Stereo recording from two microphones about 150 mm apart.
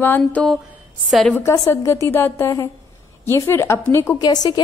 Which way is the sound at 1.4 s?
20° left (ahead or behind).